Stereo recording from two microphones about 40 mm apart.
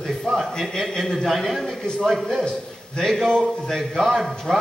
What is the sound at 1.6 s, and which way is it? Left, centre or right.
Speech, left.